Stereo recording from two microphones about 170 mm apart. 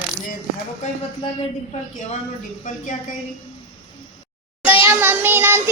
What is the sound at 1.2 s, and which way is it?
Speech, 30° left (ahead or behind).